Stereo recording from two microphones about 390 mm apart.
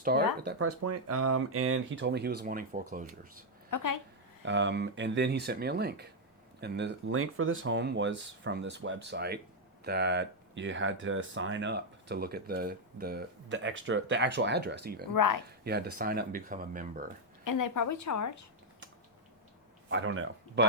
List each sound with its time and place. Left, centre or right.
0.0 s speech: right
0.4 s speech: right
3.7 s a woman's voice: left
4.4 s speech: right
15.1 s speech: left
15.6 s speech: right
17.4 s a woman's voice: left
19.9 s speech: right